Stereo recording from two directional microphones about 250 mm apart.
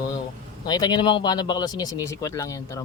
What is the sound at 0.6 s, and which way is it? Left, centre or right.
Speech, centre.